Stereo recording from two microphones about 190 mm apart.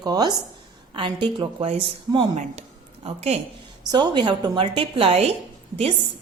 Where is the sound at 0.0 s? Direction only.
20° right (ahead or behind).